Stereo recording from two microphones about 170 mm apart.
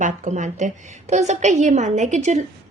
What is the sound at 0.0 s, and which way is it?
A woman's voice, 45° right (ahead or behind).